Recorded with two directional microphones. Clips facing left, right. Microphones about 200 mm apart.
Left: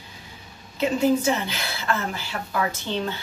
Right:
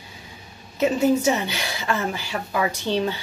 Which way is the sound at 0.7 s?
15° right (ahead or behind).